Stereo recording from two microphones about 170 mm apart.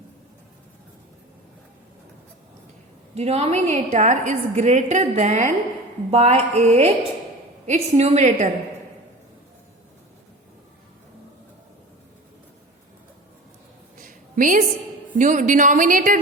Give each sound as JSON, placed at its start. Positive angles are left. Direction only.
{"t": 3.2, "sound": "a woman's voice", "side_deg": -40}
{"t": 14.0, "sound": "a sound", "side_deg": -50}
{"t": 15.1, "sound": "a woman's voice", "side_deg": -50}